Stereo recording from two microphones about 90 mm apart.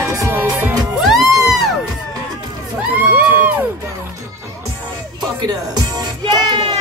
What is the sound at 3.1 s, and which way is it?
Crowd, 25° right (ahead or behind).